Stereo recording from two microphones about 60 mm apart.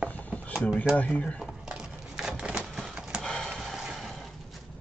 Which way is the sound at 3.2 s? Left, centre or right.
Centre.